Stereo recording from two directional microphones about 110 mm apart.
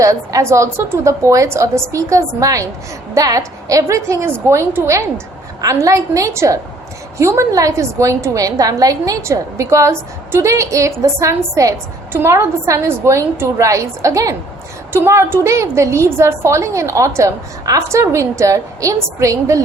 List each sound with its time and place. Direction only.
0.0 s a woman's voice: 30° right (ahead or behind)